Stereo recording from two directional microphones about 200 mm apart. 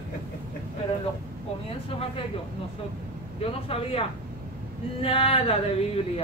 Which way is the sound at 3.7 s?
30° left (ahead or behind).